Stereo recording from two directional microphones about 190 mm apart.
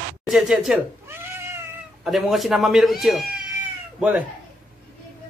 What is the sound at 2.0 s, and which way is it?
Speech, centre (ahead or behind).